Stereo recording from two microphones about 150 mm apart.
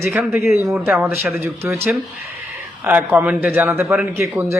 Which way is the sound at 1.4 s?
15° right (ahead or behind).